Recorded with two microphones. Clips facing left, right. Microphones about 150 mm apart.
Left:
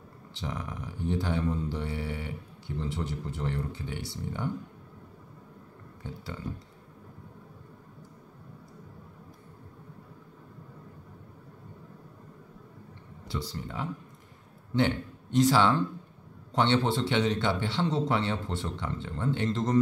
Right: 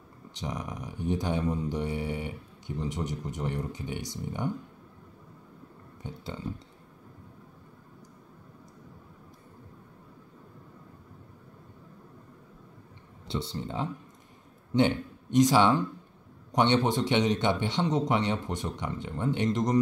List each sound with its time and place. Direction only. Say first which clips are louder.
0.3 s speech: right 1 dB; 15° right (ahead or behind)
6.0 s speech: right 1 dB; 20° right (ahead or behind)
13.3 s speech: right 3 dB; 25° right (ahead or behind)